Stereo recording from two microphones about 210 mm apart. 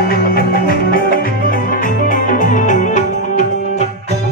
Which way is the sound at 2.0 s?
40° left (ahead or behind).